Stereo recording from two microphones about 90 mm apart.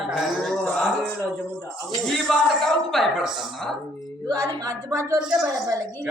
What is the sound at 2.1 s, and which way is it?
Speech, 5° left (ahead or behind).